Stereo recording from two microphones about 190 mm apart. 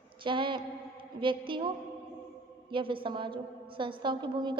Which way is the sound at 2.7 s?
25° right (ahead or behind).